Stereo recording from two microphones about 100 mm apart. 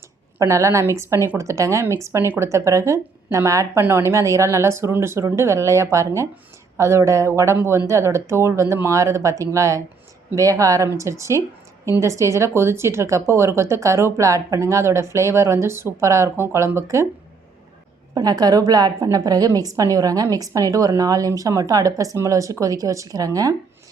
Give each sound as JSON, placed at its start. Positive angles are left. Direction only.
{"t": 0.3, "sound": "a woman's voice", "side_deg": -30}
{"t": 18.1, "sound": "a woman's voice", "side_deg": -40}